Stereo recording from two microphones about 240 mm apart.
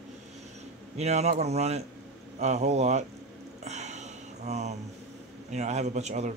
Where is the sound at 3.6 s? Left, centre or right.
Right.